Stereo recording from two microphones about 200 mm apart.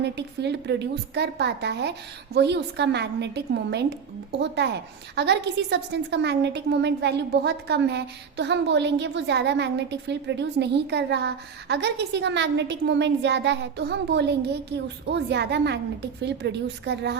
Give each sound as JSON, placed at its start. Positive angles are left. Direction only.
{"t": 0.0, "sound": "a woman's voice", "side_deg": -60}